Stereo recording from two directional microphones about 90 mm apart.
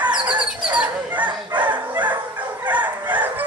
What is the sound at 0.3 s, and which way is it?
Goose, 15° right (ahead or behind).